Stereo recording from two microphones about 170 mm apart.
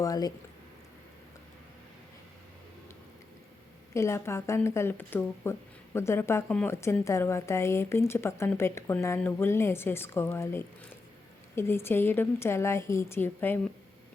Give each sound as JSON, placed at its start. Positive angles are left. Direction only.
{"t": 0.0, "sound": "speech", "side_deg": 20}
{"t": 3.9, "sound": "speech", "side_deg": 15}